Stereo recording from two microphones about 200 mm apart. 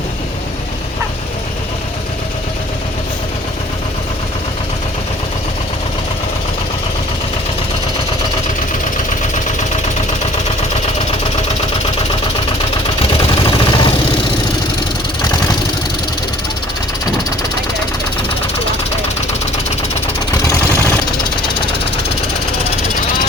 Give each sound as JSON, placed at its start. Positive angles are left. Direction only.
{"t": 13.0, "sound": "vehicle", "side_deg": 25}